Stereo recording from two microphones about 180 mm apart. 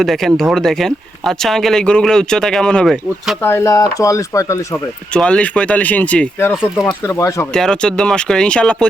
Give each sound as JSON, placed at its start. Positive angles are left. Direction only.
{"t": 0.0, "sound": "speech", "side_deg": 0}
{"t": 3.4, "sound": "speech", "side_deg": 15}
{"t": 5.1, "sound": "speech", "side_deg": 5}
{"t": 7.5, "sound": "speech", "side_deg": 5}